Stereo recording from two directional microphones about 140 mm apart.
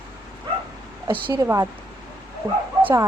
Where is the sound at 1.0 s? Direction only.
30° right (ahead or behind).